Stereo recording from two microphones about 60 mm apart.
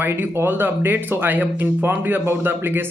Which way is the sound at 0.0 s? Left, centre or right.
Right.